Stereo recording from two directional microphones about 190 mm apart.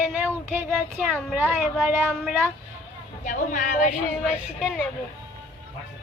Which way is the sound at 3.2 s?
40° left (ahead or behind).